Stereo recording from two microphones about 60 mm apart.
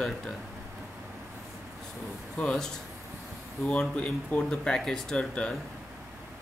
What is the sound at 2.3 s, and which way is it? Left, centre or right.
Speech, centre.